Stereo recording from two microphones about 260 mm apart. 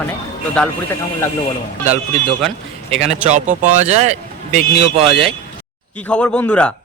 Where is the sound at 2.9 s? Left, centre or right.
Right.